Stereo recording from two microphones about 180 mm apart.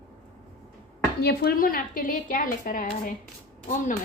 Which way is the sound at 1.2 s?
60° left (ahead or behind).